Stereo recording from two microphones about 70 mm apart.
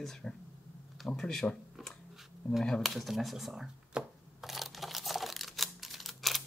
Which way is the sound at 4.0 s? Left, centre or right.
Centre.